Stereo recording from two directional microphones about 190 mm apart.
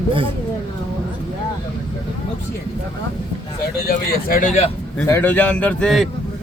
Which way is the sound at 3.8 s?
50° left (ahead or behind).